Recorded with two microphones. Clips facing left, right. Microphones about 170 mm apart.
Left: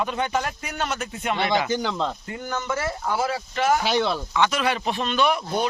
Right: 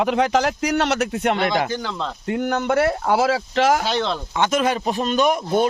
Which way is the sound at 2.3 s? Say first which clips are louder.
Right 8 dB; 70° right (ahead or behind).